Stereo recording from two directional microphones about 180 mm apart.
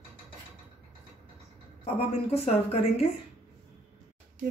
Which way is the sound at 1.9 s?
35° left (ahead or behind).